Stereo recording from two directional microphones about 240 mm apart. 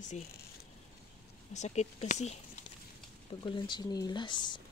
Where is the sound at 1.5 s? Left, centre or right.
Left.